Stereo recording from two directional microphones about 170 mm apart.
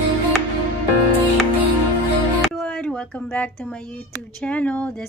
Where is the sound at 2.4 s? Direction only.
5° left (ahead or behind).